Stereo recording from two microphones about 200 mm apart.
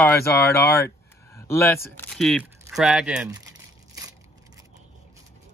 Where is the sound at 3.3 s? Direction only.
20° right (ahead or behind).